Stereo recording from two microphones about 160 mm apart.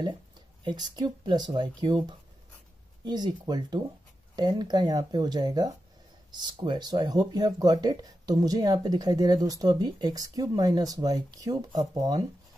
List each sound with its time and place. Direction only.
0.7 s speech: 25° right (ahead or behind)